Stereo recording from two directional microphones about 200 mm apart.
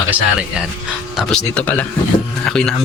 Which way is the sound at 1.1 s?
5° left (ahead or behind).